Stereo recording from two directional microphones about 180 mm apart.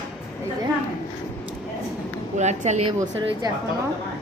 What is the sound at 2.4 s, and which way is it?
Speech, 40° right (ahead or behind).